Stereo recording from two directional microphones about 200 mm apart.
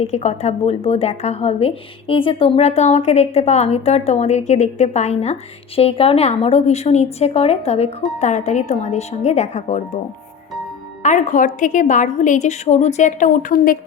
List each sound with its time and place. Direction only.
0.0 s a woman's voice: 35° left (ahead or behind)
11.0 s a woman's voice: 40° left (ahead or behind)